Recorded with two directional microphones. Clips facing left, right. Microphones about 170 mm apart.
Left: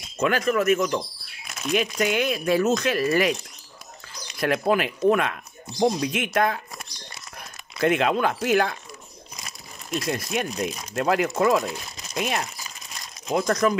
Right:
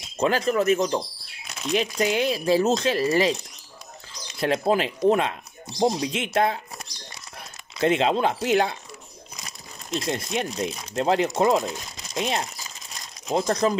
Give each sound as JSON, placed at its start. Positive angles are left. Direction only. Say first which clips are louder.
{"t": 0.2, "sound": "speech", "louder": "even", "side_deg": -30}
{"t": 4.4, "sound": "speech", "louder": "even", "side_deg": -25}
{"t": 7.8, "sound": "speech", "louder": "even", "side_deg": -25}
{"t": 9.8, "sound": "speech", "louder": "even", "side_deg": -25}